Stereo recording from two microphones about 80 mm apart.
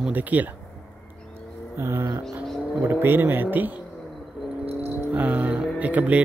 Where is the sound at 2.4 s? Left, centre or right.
Centre.